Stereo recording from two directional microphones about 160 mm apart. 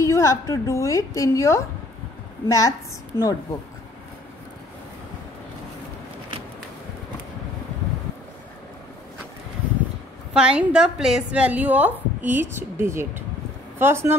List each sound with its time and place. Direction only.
0.0 s a woman's voice: 20° left (ahead or behind)
10.3 s a woman's voice: 5° right (ahead or behind)